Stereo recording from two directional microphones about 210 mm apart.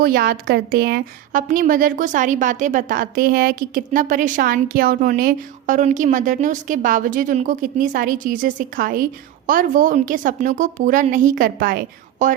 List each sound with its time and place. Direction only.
0.0 s a woman's voice: 45° right (ahead or behind)